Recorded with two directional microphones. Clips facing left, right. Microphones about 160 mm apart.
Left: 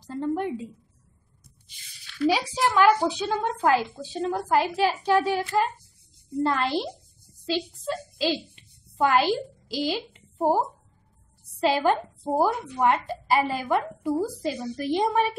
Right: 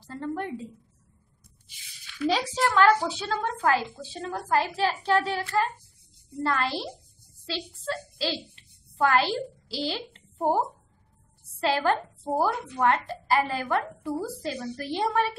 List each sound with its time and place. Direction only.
0.0 s a woman's voice: 15° left (ahead or behind)
2.2 s a child's voice: centre (ahead or behind)
2.5 s a woman's voice: 10° left (ahead or behind)
11.6 s a woman's voice: 15° left (ahead or behind)